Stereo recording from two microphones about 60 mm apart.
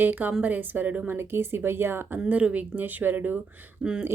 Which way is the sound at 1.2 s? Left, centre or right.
Right.